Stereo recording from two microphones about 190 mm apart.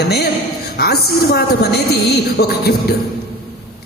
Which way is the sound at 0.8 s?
55° left (ahead or behind).